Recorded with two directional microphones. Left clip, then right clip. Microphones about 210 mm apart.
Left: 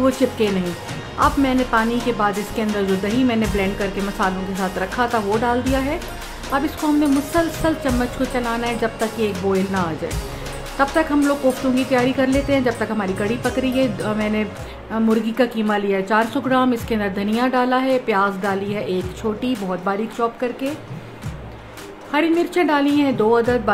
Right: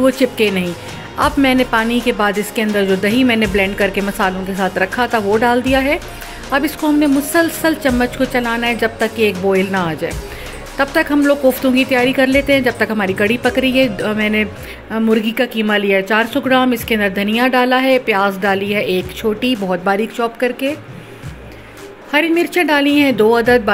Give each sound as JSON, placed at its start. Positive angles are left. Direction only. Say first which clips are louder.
{"t": 0.0, "sound": "a woman's voice", "louder": "right 5 dB", "side_deg": -15}
{"t": 22.1, "sound": "a woman's voice", "louder": "right 4 dB", "side_deg": -15}